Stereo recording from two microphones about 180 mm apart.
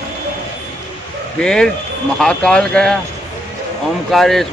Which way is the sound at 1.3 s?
5° left (ahead or behind).